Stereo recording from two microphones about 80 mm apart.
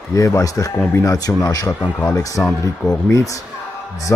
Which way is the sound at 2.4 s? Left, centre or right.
Left.